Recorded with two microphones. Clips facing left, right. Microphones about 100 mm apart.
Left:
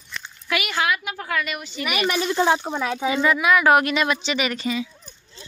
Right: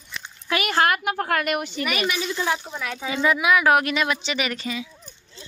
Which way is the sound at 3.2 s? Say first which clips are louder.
Even; 10° right (ahead or behind).